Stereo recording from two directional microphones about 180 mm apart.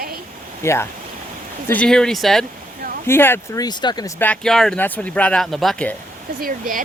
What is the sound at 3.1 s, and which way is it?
Speech, 15° left (ahead or behind).